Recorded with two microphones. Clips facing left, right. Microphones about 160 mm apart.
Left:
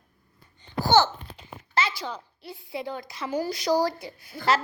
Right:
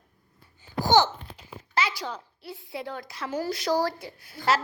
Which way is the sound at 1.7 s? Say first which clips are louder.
Left 1 dB; 10° right (ahead or behind).